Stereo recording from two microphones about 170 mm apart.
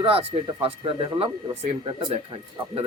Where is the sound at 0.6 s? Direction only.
30° right (ahead or behind).